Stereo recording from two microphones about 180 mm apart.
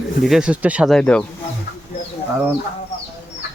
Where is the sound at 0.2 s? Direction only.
Centre (ahead or behind).